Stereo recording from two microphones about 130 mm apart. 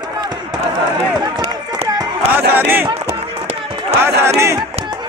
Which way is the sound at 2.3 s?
15° right (ahead or behind).